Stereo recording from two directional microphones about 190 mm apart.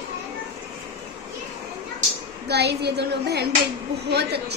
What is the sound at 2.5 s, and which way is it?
A woman's voice, 60° right (ahead or behind).